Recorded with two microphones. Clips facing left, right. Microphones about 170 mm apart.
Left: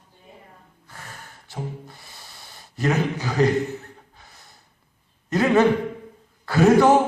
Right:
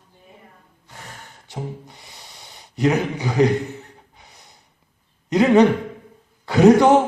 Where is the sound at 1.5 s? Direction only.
20° right (ahead or behind).